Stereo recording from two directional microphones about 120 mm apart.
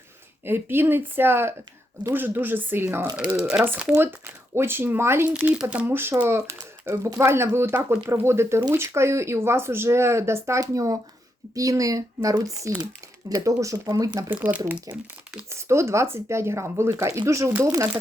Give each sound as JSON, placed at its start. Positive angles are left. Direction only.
{"t": 0.4, "sound": "speech", "side_deg": -20}
{"t": 3.3, "sound": "speech", "side_deg": -5}
{"t": 5.3, "sound": "speech", "side_deg": -10}
{"t": 14.3, "sound": "speech", "side_deg": -15}
{"t": 14.9, "sound": "speech", "side_deg": -30}